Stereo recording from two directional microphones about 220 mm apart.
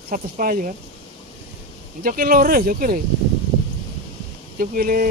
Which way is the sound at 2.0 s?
40° right (ahead or behind).